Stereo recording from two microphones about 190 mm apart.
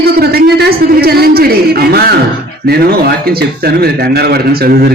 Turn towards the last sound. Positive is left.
turn(degrees=-55)  # may be behind; listen again after turning